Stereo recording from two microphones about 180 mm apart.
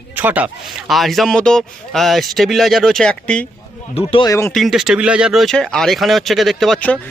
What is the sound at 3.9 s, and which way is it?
Speech, 30° left (ahead or behind).